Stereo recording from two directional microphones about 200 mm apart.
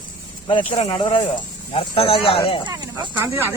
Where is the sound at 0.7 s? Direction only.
25° left (ahead or behind).